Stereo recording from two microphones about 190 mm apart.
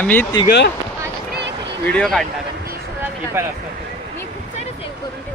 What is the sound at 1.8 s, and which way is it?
Speech, 5° left (ahead or behind).